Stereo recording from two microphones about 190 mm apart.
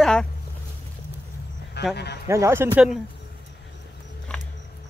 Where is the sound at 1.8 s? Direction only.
60° left (ahead or behind).